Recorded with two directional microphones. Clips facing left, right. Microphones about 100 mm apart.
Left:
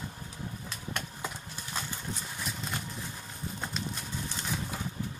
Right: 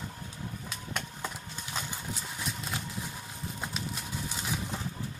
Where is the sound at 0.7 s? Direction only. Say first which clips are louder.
Even; 5° left (ahead or behind).